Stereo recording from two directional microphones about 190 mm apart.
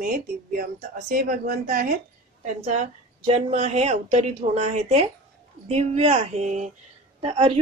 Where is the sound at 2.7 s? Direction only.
35° right (ahead or behind).